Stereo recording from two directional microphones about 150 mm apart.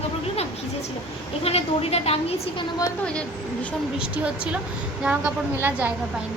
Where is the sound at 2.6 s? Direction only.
25° left (ahead or behind).